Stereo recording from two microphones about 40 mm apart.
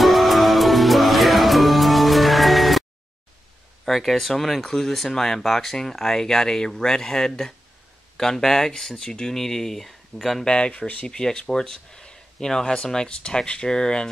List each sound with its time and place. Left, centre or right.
0.0 s music: centre
3.8 s speech: centre
10.4 s speech: left
10.7 s speech: left
11.1 s speech: centre